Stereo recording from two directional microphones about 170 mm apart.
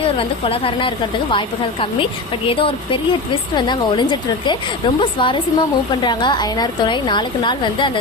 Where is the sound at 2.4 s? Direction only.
30° left (ahead or behind).